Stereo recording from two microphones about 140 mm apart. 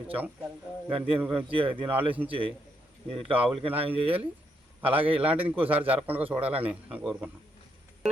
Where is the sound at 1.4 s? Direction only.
40° right (ahead or behind).